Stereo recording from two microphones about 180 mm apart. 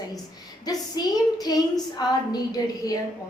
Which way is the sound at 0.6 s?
20° left (ahead or behind).